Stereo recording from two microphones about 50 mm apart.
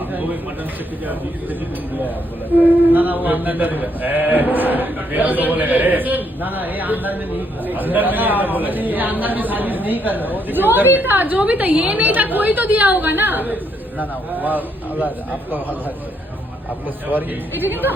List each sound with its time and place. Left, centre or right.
2.5 s a man's voice: right
17.1 s a man's voice: right